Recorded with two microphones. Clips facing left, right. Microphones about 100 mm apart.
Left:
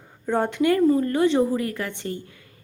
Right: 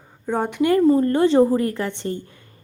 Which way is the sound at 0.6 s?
25° right (ahead or behind).